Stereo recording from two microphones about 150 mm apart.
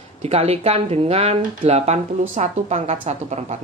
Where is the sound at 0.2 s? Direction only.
40° right (ahead or behind).